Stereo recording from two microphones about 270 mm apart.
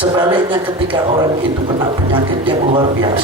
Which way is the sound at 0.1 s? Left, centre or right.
Centre.